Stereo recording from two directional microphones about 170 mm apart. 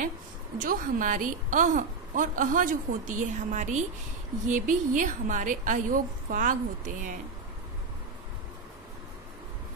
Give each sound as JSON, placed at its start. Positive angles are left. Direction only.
{"t": 0.6, "sound": "a woman's voice", "side_deg": -50}